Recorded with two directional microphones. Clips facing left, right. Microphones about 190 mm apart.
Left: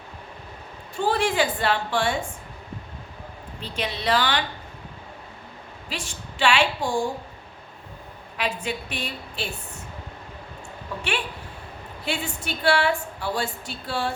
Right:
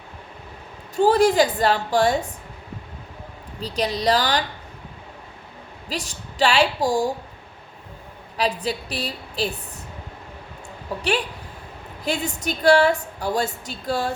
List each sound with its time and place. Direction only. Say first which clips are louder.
0.9 s a woman's voice: right 7 dB; 40° right (ahead or behind)
3.6 s a woman's voice: right 6 dB; 40° right (ahead or behind)
5.9 s a woman's voice: right 4 dB; 40° right (ahead or behind)
8.4 s a woman's voice: right 4 dB; 35° right (ahead or behind)
12.0 s a woman's voice: right 4 dB; 40° right (ahead or behind)